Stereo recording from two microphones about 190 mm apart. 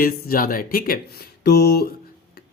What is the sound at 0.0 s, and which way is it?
Speech, 50° left (ahead or behind).